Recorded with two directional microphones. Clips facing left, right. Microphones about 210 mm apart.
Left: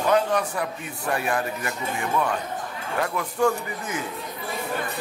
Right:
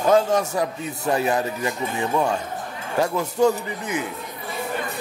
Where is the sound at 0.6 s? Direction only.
25° right (ahead or behind).